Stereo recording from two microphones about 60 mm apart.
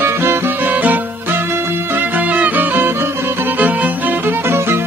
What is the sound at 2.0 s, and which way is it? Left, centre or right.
Music, right.